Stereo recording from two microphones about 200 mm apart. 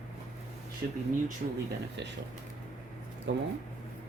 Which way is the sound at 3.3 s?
65° right (ahead or behind).